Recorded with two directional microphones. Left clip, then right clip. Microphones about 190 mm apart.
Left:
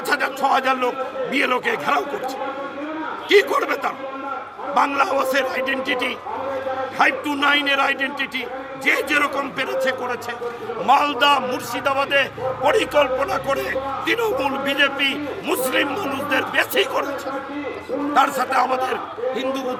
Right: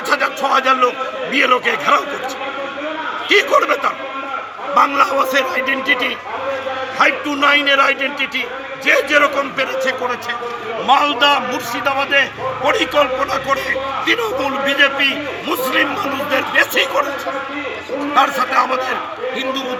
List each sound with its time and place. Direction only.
0.1 s a sound: 30° left (ahead or behind)
1.3 s a man's voice: 35° left (ahead or behind)
3.2 s a man's voice: 35° left (ahead or behind)
18.1 s a man's voice: 30° left (ahead or behind)